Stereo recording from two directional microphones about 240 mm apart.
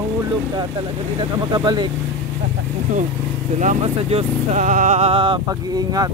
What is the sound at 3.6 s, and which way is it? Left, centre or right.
Speech, right.